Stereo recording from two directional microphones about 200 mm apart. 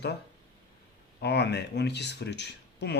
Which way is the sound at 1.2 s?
55° left (ahead or behind).